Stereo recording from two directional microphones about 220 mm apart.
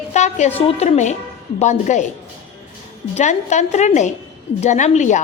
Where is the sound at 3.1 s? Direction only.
30° left (ahead or behind).